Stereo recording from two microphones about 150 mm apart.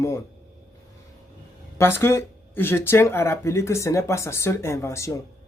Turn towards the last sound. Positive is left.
turn(degrees=20)  # may be behind; listen again after turning